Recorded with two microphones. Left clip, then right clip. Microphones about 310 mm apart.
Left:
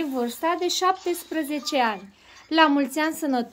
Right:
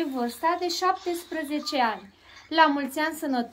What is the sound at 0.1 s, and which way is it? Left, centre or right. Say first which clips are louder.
Speech: left 1 dB; left.